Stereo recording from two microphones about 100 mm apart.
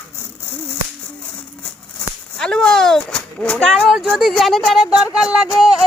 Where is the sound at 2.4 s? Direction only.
5° left (ahead or behind).